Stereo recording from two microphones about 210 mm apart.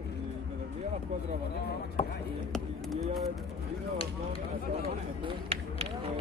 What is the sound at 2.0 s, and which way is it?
Speech, 40° left (ahead or behind).